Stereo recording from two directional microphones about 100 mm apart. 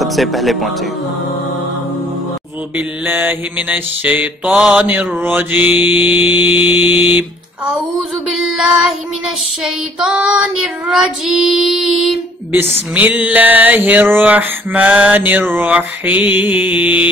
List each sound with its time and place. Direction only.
0.0 s child singing: centre (ahead or behind)
3.1 s mantra: 20° right (ahead or behind)
8.3 s child singing: 5° right (ahead or behind)
9.9 s child singing: 10° right (ahead or behind)
12.9 s mantra: 15° right (ahead or behind)